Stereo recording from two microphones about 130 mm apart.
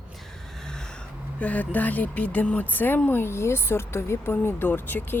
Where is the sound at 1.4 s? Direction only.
10° left (ahead or behind).